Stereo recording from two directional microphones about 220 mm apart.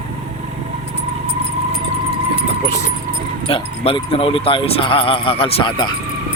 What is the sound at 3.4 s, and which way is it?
A man's voice, 25° left (ahead or behind).